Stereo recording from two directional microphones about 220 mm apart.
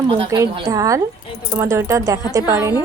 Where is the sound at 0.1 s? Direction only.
20° right (ahead or behind).